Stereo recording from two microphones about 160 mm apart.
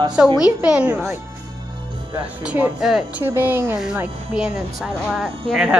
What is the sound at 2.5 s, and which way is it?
A child's voice, 10° right (ahead or behind).